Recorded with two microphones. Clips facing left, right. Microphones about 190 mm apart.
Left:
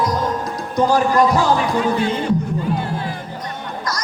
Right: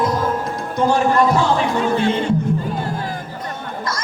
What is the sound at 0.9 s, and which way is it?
Speech, 25° right (ahead or behind).